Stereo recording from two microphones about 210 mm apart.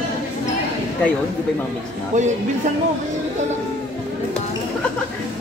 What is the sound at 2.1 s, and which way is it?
Speech, 35° right (ahead or behind).